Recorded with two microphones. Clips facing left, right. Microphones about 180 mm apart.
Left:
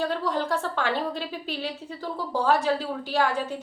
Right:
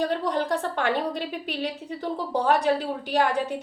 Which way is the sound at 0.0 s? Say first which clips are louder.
Right 2 dB; 15° right (ahead or behind).